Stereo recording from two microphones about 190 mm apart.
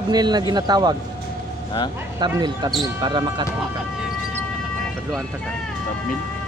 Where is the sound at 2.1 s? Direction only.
20° right (ahead or behind).